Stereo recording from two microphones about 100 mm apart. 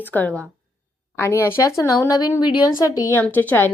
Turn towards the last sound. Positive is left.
turn(degrees=20)  # may be behind; listen again after turning